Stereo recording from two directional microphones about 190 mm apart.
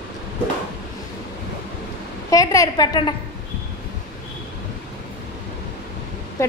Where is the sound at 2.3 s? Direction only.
15° left (ahead or behind).